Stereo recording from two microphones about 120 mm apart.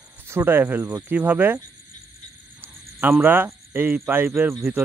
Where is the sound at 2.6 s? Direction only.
15° right (ahead or behind).